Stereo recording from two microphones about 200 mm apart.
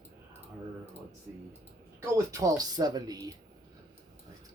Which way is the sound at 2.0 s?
15° right (ahead or behind).